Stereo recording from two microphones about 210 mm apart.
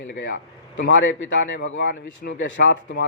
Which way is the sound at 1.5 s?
70° left (ahead or behind).